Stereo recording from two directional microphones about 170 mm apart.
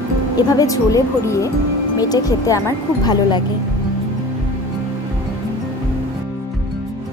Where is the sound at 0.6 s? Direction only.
20° left (ahead or behind).